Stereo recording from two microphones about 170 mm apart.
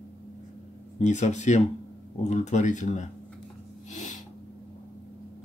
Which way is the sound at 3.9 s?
45° left (ahead or behind).